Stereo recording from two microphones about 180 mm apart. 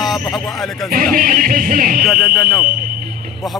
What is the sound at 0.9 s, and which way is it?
Music, 50° right (ahead or behind).